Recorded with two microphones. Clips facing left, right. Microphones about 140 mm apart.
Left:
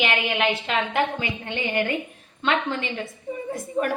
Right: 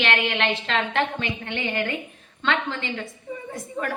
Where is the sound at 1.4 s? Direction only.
20° left (ahead or behind).